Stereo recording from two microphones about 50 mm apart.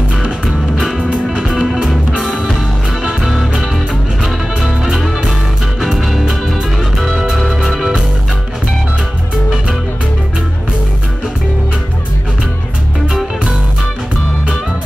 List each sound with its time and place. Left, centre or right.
0.9 s music: centre
1.5 s music: centre
4.2 s music: centre